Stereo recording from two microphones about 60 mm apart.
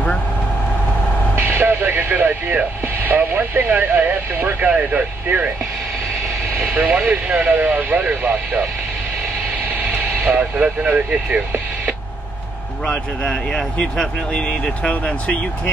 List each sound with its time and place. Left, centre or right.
1.4 s vehicle: right
2.0 s speech: right
6.6 s speech: right
10.1 s vehicle: right
10.6 s speech: right
12.8 s speech: left